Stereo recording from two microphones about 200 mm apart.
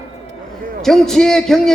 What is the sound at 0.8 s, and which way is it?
Speech, centre (ahead or behind).